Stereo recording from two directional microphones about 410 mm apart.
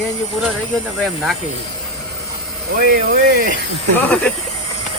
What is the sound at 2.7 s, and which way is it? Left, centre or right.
Speech, right.